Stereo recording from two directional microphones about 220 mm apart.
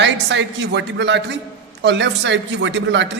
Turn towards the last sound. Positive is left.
turn(degrees=-55)  # may be behind; listen again after turning